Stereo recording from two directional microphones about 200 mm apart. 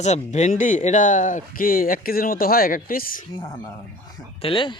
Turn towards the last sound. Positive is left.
turn(degrees=25)  # may be behind; listen again after turning